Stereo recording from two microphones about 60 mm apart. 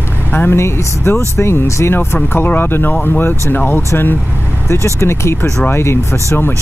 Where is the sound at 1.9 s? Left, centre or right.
Left.